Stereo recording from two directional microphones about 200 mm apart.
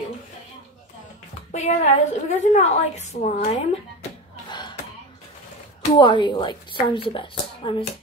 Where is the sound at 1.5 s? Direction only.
35° left (ahead or behind).